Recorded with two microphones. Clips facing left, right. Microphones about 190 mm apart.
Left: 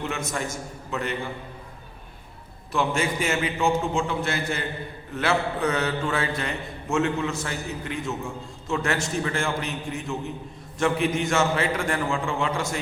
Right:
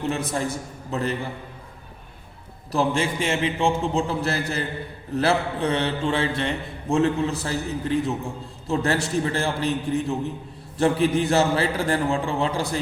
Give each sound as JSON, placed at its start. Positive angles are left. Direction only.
{"t": 0.0, "sound": "a man's voice", "side_deg": -35}
{"t": 2.7, "sound": "a man's voice", "side_deg": -30}